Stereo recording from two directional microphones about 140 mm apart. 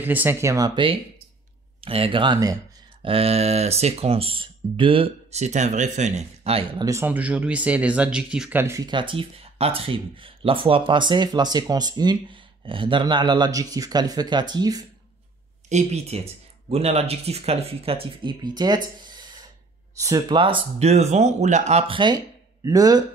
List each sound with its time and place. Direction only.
0.0 s speech: 15° right (ahead or behind); by 0.9 s 30° right (ahead or behind)
1.8 s speech: 45° right (ahead or behind)
6.8 s speech: 20° right (ahead or behind)
8.8 s speech: 35° right (ahead or behind)
15.7 s speech: 50° right (ahead or behind); by 18.8 s 30° right (ahead or behind)
18.9 s gasp: 30° right (ahead or behind)
20.0 s speech: 25° right (ahead or behind)
20.3 s speech: 40° right (ahead or behind)